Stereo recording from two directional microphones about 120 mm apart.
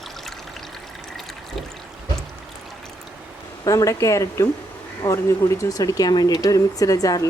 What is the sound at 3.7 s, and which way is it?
Speech, 25° left (ahead or behind).